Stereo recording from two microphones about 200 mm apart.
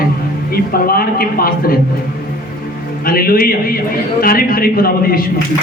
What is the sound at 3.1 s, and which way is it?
A man's voice, 50° left (ahead or behind).